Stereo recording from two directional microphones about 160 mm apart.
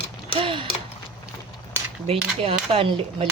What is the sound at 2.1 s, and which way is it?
Speech, 40° right (ahead or behind).